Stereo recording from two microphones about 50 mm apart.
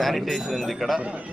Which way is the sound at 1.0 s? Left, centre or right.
Right.